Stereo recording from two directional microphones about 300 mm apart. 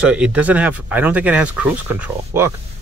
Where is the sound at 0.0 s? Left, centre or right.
Centre.